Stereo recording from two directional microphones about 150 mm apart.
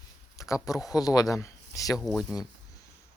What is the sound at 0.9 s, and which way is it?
Speech, 25° left (ahead or behind).